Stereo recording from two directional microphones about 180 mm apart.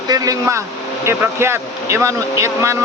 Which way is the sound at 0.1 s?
15° right (ahead or behind).